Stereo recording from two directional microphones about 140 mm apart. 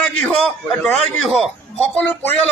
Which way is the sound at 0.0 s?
5° left (ahead or behind).